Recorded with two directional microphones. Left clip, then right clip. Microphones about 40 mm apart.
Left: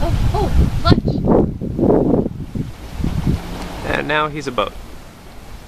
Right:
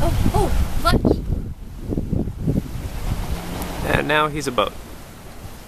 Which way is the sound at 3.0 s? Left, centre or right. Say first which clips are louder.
Left 7 dB; right.